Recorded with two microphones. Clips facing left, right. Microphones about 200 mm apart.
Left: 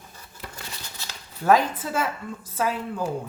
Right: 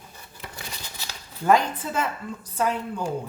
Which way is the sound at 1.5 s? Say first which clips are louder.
Left 1 dB; 5° left (ahead or behind).